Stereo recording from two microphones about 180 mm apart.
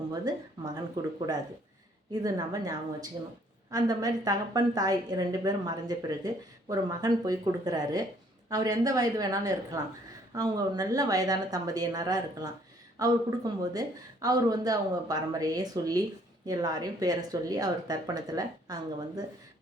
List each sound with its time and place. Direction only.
0.1 s a woman's voice: 20° right (ahead or behind)
2.2 s a woman's voice: 20° right (ahead or behind)